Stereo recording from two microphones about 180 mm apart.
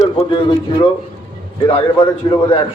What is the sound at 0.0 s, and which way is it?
A man's voice, 30° left (ahead or behind).